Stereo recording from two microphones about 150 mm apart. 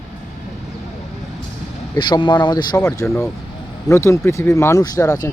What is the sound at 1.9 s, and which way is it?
Speech, 30° left (ahead or behind).